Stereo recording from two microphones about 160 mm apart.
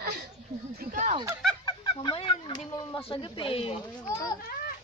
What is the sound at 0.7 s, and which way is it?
Speech, 55° right (ahead or behind).